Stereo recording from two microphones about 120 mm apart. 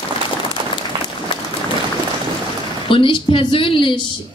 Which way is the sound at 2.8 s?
45° left (ahead or behind).